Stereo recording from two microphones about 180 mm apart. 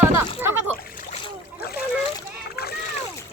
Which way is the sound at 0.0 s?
10° right (ahead or behind).